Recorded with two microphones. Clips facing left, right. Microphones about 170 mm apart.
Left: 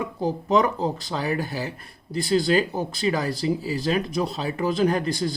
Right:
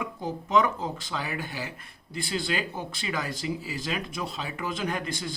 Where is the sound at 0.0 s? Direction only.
35° left (ahead or behind).